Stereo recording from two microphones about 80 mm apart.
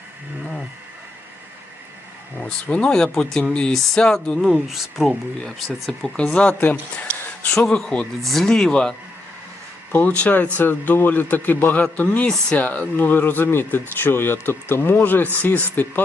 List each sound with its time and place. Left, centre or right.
2.4 s speech: centre
6.1 s speech: centre
9.9 s speech: centre